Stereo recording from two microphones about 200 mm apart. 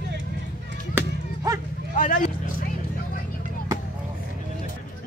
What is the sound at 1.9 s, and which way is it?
Vehicle, 40° left (ahead or behind).